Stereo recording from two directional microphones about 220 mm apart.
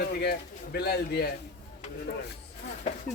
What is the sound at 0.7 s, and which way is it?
Speech, 50° left (ahead or behind).